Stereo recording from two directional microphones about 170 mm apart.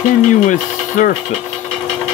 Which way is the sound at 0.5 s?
45° left (ahead or behind).